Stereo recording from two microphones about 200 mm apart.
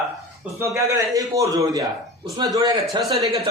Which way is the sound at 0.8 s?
15° right (ahead or behind).